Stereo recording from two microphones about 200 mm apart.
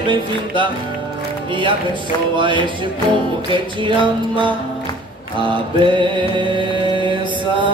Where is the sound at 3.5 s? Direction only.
25° right (ahead or behind).